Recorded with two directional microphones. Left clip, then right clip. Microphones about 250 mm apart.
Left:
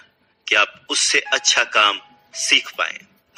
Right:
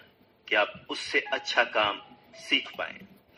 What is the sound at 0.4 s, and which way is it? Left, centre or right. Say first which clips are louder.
A man's voice: left 9 dB; left.